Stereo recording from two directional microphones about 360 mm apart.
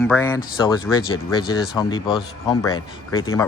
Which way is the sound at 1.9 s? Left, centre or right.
Centre.